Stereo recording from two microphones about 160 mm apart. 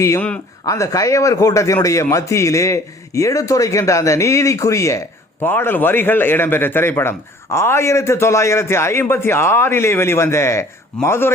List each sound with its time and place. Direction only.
0.6 s speech: 20° left (ahead or behind)